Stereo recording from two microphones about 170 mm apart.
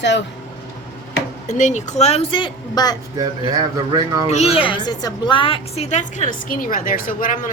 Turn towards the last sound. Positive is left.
turn(degrees=55)  # may be behind; listen again after turning